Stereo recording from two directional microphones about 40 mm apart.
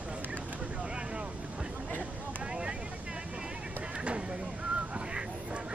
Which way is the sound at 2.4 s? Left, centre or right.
Right.